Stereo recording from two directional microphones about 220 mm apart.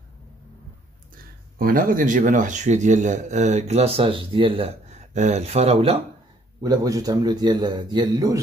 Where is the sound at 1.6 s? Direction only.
40° right (ahead or behind).